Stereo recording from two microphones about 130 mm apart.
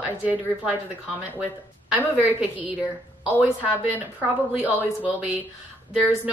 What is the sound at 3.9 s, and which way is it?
A woman's voice, 10° right (ahead or behind).